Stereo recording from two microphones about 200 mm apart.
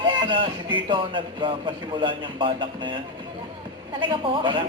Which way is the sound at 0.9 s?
25° right (ahead or behind).